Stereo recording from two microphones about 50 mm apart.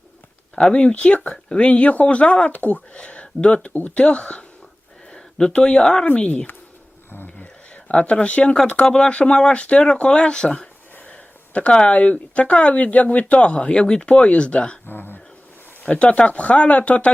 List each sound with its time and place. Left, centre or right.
0.5 s speech: centre
7.7 s speech: left
10.9 s speech: left
14.8 s a sound: left
15.8 s speech: left